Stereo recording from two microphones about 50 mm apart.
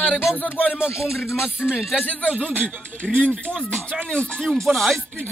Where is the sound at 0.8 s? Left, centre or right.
Left.